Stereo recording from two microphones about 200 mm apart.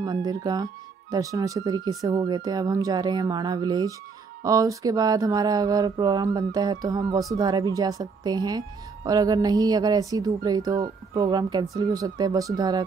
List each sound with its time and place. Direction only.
0.0 s a woman's voice: 20° right (ahead or behind)